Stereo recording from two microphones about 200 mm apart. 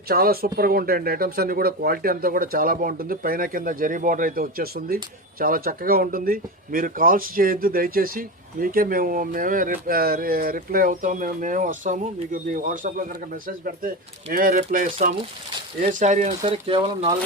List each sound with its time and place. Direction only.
0.1 s speech: 50° right (ahead or behind)
16.5 s speech: 25° right (ahead or behind)